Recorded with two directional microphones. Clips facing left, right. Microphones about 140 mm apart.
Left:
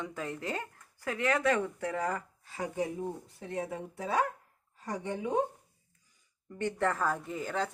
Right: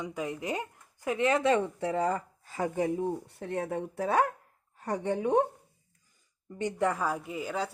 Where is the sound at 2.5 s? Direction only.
50° right (ahead or behind).